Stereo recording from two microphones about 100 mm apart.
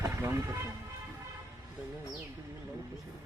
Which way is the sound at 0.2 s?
30° right (ahead or behind).